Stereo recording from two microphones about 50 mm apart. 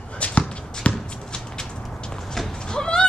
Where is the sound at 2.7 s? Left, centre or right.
Centre.